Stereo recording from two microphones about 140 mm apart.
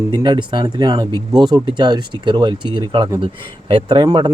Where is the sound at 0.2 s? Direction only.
35° right (ahead or behind).